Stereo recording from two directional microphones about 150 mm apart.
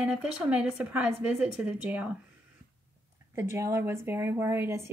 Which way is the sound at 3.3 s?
20° right (ahead or behind).